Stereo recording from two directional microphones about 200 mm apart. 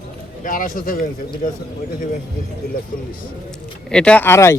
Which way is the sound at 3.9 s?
5° left (ahead or behind).